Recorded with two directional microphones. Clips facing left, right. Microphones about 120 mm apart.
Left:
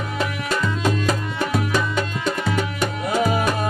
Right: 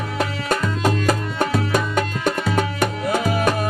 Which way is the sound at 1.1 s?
50° right (ahead or behind).